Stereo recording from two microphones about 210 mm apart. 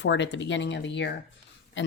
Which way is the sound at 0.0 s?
60° left (ahead or behind).